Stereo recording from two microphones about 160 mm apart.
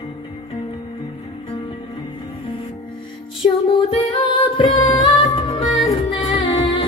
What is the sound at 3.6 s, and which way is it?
Music, 35° left (ahead or behind).